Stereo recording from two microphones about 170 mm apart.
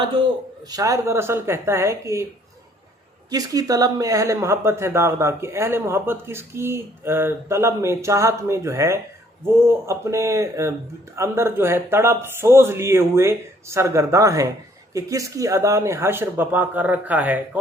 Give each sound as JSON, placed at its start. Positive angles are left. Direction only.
{"t": 0.7, "sound": "speech", "side_deg": -20}
{"t": 3.2, "sound": "speech", "side_deg": -20}